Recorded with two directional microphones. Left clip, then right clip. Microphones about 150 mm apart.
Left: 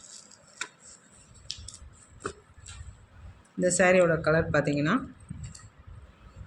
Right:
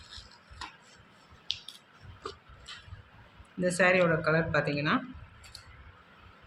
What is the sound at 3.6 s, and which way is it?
Speech, 45° left (ahead or behind).